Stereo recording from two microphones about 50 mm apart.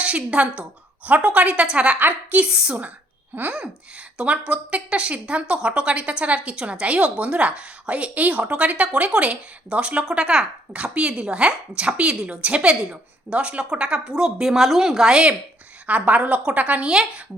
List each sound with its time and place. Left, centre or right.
0.0 s speech: right
2.0 s a woman's voice: right
2.4 s a woman's voice: centre
16.9 s a woman's voice: centre